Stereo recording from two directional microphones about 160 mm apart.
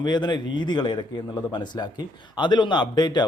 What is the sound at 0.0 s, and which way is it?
A man's voice, 25° left (ahead or behind).